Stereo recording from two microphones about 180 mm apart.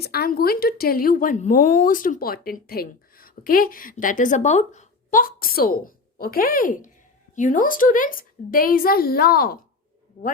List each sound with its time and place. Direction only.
0.0 s speech: 60° left (ahead or behind)